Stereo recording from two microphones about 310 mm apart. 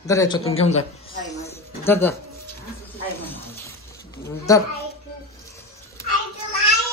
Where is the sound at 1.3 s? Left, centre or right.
Centre.